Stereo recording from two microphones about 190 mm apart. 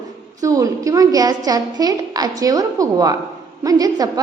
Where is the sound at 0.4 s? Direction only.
15° right (ahead or behind).